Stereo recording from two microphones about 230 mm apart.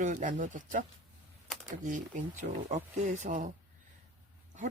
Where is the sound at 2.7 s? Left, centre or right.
Right.